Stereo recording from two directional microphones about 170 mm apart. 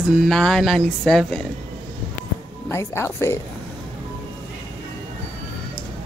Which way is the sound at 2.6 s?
15° left (ahead or behind).